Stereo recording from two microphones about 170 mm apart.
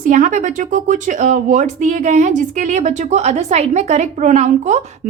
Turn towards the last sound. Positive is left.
turn(degrees=-45)  # may be behind; listen again after turning